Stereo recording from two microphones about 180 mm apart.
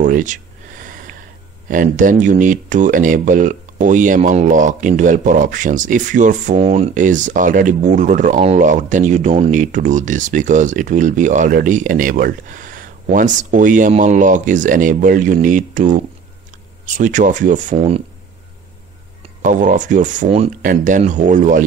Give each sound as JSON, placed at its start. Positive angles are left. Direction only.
{"t": 0.0, "sound": "a sound", "side_deg": -45}
{"t": 1.7, "sound": "speech", "side_deg": -45}
{"t": 6.9, "sound": "speech", "side_deg": -45}
{"t": 19.4, "sound": "speech", "side_deg": -45}